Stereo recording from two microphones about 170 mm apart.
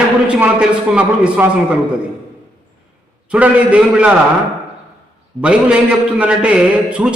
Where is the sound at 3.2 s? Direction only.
10° right (ahead or behind).